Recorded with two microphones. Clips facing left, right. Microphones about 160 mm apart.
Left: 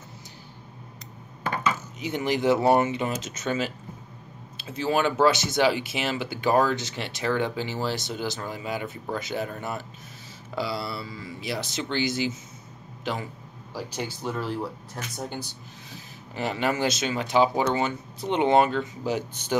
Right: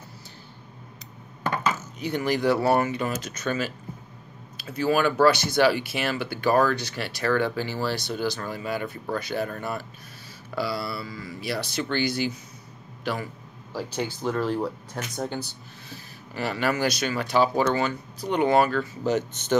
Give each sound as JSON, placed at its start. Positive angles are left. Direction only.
{"t": 2.0, "sound": "speech", "side_deg": 20}
{"t": 4.7, "sound": "a man's voice", "side_deg": 25}
{"t": 13.7, "sound": "speech", "side_deg": 10}
{"t": 15.9, "sound": "speech", "side_deg": 20}
{"t": 19.0, "sound": "speech", "side_deg": 10}